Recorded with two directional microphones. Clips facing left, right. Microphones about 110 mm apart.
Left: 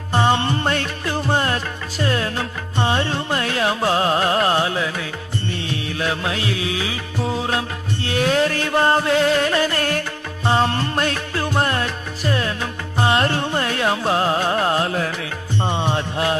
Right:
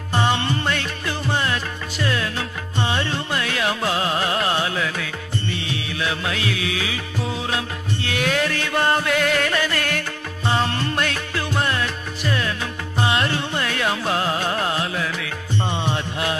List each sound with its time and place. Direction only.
0.3 s music: 30° left (ahead or behind)
5.5 s music: 40° left (ahead or behind)